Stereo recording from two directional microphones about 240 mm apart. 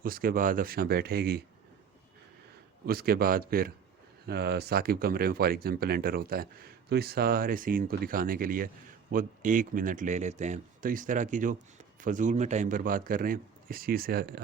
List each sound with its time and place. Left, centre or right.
0.0 s speech: right
2.8 s speech: right